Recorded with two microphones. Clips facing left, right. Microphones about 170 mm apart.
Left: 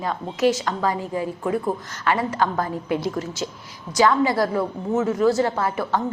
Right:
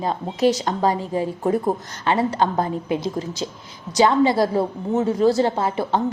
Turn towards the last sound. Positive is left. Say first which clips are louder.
# right 2 dB
turn(degrees=-25)  # may be behind; listen again after turning